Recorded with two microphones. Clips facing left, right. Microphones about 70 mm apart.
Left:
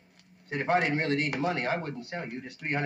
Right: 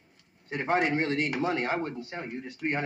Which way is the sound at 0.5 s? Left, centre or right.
Centre.